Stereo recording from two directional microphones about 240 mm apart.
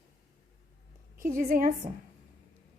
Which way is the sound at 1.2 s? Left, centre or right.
Right.